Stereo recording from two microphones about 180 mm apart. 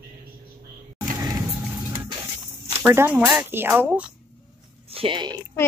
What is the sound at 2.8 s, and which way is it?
Speech, 10° right (ahead or behind).